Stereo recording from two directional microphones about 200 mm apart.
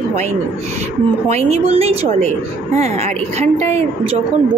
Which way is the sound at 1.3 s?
30° right (ahead or behind).